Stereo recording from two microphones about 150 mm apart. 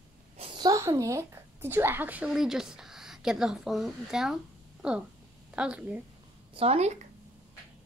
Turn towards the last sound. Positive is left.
turn(degrees=-50)  # may be behind; listen again after turning